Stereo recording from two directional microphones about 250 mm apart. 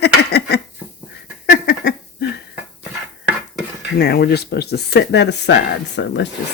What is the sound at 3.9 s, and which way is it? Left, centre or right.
Speech, left.